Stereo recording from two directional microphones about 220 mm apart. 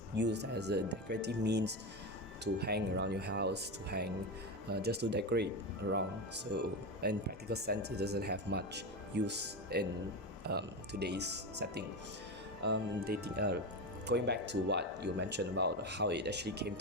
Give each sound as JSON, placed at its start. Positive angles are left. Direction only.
{"t": 0.2, "sound": "speech", "side_deg": -50}